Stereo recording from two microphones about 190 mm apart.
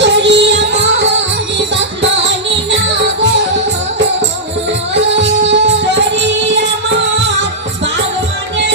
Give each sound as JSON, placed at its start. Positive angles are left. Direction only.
{"t": 0.0, "sound": "music", "side_deg": -70}
{"t": 2.6, "sound": "music", "side_deg": -70}
{"t": 4.9, "sound": "music", "side_deg": -70}